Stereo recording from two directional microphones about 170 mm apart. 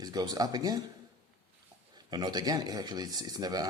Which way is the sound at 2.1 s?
25° right (ahead or behind).